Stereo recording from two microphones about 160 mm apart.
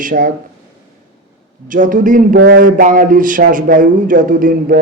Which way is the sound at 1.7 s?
55° right (ahead or behind).